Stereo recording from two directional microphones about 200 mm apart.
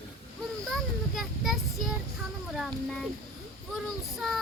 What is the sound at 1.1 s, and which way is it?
Speech, centre (ahead or behind).